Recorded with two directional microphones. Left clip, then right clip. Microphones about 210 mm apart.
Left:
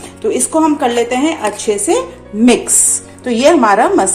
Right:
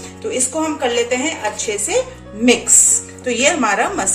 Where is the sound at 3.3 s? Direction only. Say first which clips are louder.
Left 6 dB; 20° left (ahead or behind).